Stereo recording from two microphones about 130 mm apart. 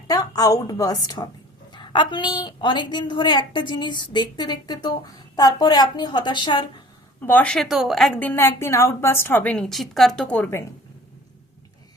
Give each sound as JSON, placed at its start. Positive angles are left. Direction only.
{"t": 0.1, "sound": "a woman's voice", "side_deg": 30}
{"t": 7.2, "sound": "a woman's voice", "side_deg": 15}